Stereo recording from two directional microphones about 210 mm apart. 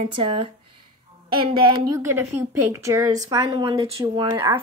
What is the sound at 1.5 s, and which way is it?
Speech, 25° right (ahead or behind).